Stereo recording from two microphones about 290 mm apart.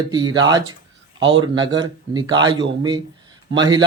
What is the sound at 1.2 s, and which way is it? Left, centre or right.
Speech, right.